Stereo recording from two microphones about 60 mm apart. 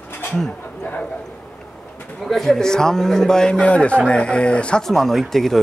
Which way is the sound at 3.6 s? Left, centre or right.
Left.